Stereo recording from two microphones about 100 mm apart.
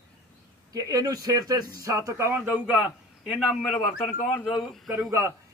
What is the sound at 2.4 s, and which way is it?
Speech, 15° right (ahead or behind).